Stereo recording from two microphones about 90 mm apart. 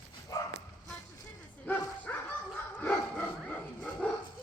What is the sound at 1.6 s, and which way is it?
Bow-wow, 20° left (ahead or behind).